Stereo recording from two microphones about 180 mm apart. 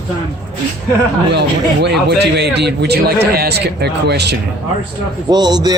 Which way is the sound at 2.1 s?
65° right (ahead or behind).